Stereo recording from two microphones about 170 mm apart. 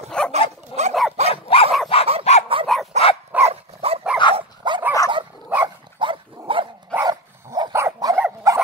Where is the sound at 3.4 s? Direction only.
35° right (ahead or behind).